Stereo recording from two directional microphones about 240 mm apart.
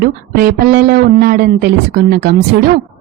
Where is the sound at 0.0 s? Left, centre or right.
Right.